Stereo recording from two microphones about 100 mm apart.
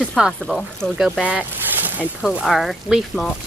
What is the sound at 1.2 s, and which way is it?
Boat, 15° right (ahead or behind).